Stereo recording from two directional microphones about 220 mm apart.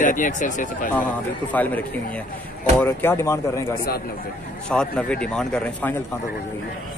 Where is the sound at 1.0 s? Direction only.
5° left (ahead or behind).